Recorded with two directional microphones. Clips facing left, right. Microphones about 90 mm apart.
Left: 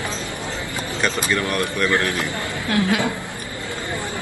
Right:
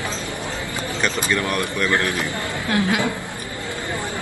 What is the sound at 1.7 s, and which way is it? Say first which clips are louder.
Speech: left 1 dB; 20° left (ahead or behind).